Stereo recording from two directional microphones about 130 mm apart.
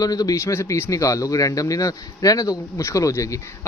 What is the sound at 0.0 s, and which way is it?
Speech, 30° left (ahead or behind).